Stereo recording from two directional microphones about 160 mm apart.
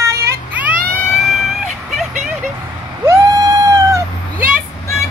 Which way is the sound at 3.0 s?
15° right (ahead or behind).